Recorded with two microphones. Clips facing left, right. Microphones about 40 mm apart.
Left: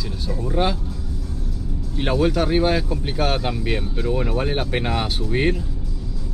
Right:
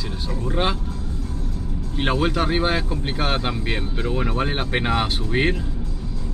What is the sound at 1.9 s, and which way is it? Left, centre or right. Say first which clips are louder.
Speech: left 1 dB; right.